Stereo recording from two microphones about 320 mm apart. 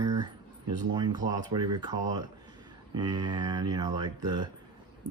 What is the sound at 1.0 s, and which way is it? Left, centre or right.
Speech, centre.